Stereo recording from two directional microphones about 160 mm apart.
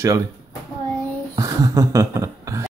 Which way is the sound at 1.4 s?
20° right (ahead or behind).